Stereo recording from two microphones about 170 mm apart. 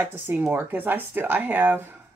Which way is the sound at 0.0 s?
15° right (ahead or behind).